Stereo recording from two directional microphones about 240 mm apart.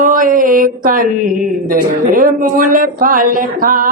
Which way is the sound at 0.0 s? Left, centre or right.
Right.